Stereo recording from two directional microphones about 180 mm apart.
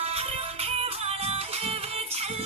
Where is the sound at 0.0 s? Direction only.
35° right (ahead or behind).